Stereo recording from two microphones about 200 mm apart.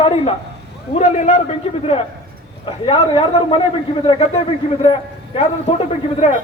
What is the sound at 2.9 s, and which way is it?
Speech, 25° left (ahead or behind).